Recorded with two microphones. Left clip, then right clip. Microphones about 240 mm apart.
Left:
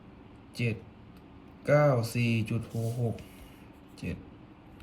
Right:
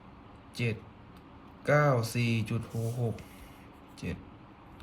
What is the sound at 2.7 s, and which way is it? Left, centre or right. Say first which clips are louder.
Speech: left 1 dB; centre.